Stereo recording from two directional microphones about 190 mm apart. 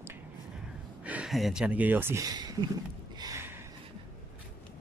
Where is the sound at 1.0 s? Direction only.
5° right (ahead or behind).